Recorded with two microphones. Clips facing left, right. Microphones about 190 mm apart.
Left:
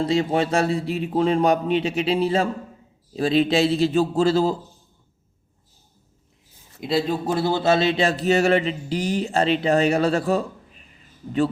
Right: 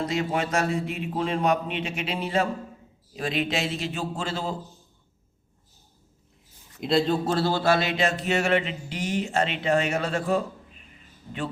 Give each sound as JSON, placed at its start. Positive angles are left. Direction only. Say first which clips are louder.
{"t": 0.0, "sound": "a man's voice", "louder": "left 6 dB", "side_deg": 30}
{"t": 6.7, "sound": "a man's voice", "louder": "even", "side_deg": 0}